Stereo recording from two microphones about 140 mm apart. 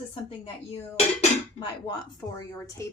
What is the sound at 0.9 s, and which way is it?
Dishes, 50° left (ahead or behind).